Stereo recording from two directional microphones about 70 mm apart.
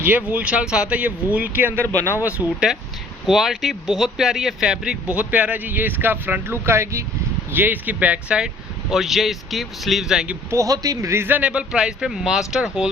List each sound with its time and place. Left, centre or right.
0.0 s speech: right
1.9 s a man's voice: right
2.4 s speech: centre
5.0 s speech: right
7.5 s speech: right
8.9 s speech: centre
10.5 s a man's voice: right
11.2 s speech: right